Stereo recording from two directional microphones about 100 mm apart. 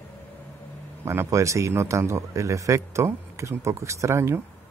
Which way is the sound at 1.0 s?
25° right (ahead or behind).